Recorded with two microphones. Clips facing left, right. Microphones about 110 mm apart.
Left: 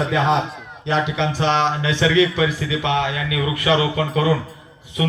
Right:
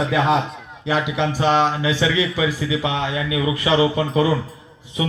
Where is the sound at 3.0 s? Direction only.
25° right (ahead or behind).